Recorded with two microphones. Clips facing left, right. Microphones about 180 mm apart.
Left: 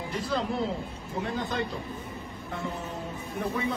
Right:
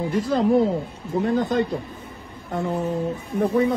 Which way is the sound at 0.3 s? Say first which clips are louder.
Right 11 dB; 45° right (ahead or behind).